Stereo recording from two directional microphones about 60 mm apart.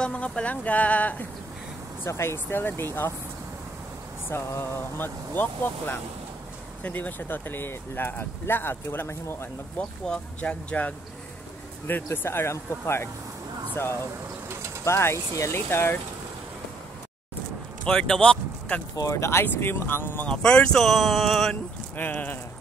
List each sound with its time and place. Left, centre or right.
0.0 s a woman's voice: centre
2.0 s speech: left
4.3 s speech: left
9.8 s a woman's voice: centre
11.9 s speech: left
14.9 s speech: left
15.5 s speech: left
17.9 s speech: centre
18.9 s speech: left
19.4 s speech: left
20.2 s speech: centre
21.9 s speech: left